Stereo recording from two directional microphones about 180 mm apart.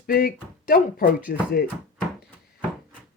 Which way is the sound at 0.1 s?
55° left (ahead or behind).